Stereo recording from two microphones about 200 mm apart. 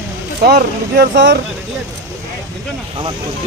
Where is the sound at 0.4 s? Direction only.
55° right (ahead or behind).